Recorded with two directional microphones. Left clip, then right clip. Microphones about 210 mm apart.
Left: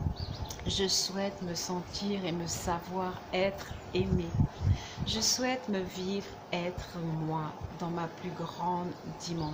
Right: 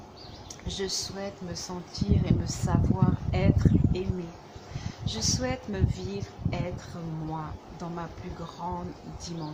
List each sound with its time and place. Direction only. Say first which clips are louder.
0.7 s a woman's voice: left 2 dB; 5° left (ahead or behind)
5.0 s a woman's voice: even; centre (ahead or behind)